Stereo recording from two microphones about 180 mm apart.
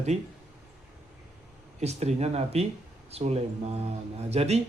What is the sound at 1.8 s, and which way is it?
A man's voice, 35° right (ahead or behind).